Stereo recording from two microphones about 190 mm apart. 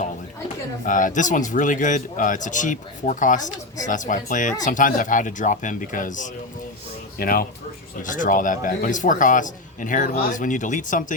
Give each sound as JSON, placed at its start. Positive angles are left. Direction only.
{"t": 0.9, "sound": "a man's voice", "side_deg": 45}